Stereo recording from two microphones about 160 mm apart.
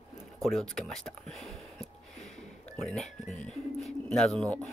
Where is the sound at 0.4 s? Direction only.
Centre (ahead or behind).